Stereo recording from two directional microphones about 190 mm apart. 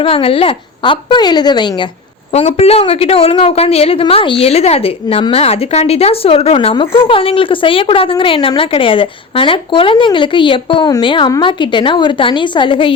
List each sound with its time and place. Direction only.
0.0 s a woman's voice: 30° left (ahead or behind)
2.3 s a woman's voice: 35° left (ahead or behind)